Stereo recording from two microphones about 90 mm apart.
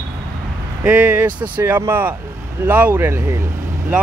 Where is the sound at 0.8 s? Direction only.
20° right (ahead or behind).